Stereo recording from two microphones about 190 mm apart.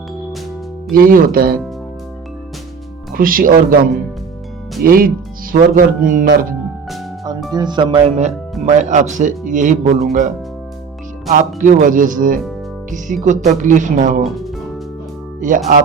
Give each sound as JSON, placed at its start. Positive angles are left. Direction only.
{"t": 0.9, "sound": "speech", "side_deg": -50}
{"t": 3.2, "sound": "speech", "side_deg": -50}
{"t": 4.8, "sound": "speech", "side_deg": -50}
{"t": 7.5, "sound": "speech", "side_deg": -25}
{"t": 11.3, "sound": "speech", "side_deg": -40}
{"t": 14.3, "sound": "speech", "side_deg": 0}
{"t": 15.4, "sound": "speech", "side_deg": -45}